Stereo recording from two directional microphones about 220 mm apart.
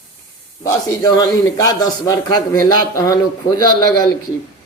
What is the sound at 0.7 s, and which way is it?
A man's voice, 15° left (ahead or behind).